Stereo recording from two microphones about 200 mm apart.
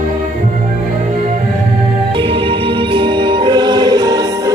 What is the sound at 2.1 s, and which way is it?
Music, 25° right (ahead or behind).